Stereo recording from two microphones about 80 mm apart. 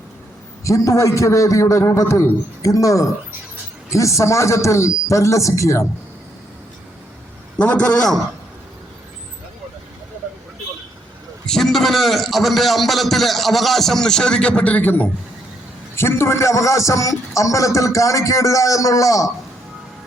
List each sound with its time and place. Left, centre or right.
0.6 s a man's voice: left
7.6 s a man's voice: centre
11.4 s a man's voice: centre; by 19.3 s left